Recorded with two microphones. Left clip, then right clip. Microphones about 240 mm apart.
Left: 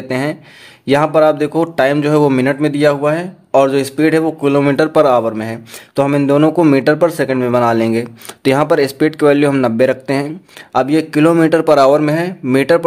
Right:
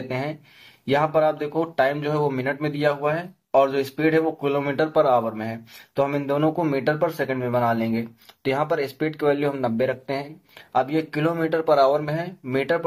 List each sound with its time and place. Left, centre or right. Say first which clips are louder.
0.1 s speech: left 12 dB; left